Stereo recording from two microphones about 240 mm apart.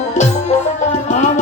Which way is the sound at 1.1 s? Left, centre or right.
Left.